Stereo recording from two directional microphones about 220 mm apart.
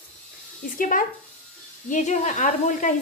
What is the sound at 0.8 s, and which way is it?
Speech, 35° left (ahead or behind).